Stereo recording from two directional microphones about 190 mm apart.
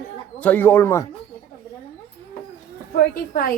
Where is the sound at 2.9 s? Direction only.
50° left (ahead or behind).